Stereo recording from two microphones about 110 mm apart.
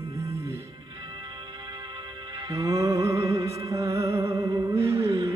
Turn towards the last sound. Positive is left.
turn(degrees=-30)  # may be behind; listen again after turning